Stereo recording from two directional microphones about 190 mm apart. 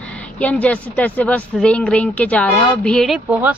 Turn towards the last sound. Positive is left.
turn(degrees=-10)  # may be behind; listen again after turning